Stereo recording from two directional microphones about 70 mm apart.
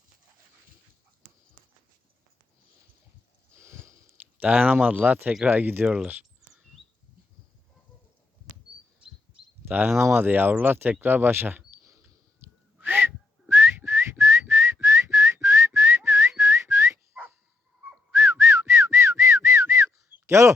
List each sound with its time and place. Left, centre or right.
3.5 s sniff: right
4.4 s speech: right
5.8 s speech: centre
9.6 s speech: right
12.8 s whistling: right
18.1 s whistling: right
20.2 s speech: right